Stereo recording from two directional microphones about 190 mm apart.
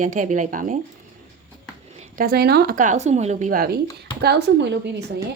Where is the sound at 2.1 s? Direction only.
55° right (ahead or behind).